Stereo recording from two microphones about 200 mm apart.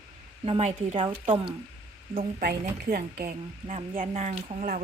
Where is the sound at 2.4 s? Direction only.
50° right (ahead or behind).